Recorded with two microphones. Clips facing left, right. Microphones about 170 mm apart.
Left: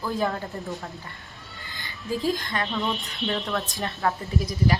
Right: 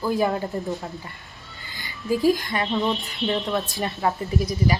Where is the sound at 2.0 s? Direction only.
20° right (ahead or behind).